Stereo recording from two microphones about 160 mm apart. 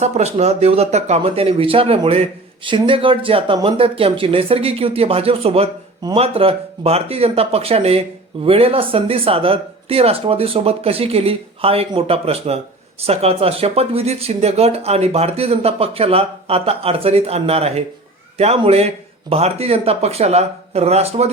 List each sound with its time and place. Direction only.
0.0 s speech: 45° right (ahead or behind)